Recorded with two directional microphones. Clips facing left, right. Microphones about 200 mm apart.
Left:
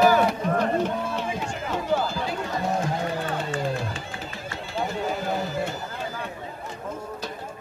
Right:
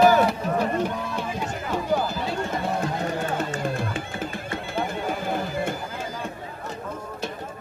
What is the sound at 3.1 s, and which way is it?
Music, 50° right (ahead or behind).